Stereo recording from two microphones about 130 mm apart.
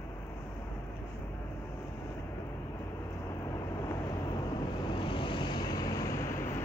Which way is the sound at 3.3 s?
25° left (ahead or behind).